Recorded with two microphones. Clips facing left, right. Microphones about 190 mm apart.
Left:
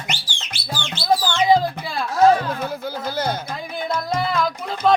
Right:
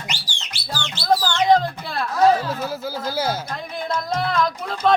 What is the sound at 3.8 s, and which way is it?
Music, centre (ahead or behind).